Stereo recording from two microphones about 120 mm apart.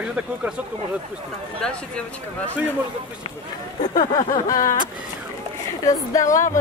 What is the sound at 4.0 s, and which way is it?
Vehicle, 90° left.